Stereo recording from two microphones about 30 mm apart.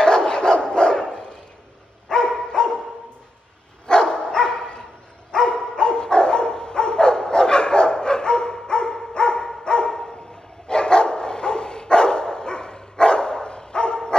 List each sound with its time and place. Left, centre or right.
0.0 s dog: left
3.8 s dog: left